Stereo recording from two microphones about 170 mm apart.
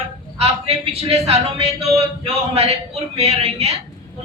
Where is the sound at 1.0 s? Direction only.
35° right (ahead or behind).